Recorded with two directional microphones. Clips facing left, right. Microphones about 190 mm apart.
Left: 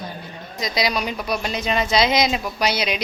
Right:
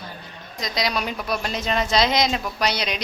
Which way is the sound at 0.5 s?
5° left (ahead or behind).